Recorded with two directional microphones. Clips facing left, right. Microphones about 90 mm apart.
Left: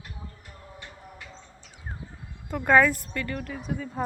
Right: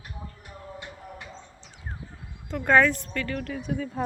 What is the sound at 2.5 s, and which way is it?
A woman's voice, 10° left (ahead or behind).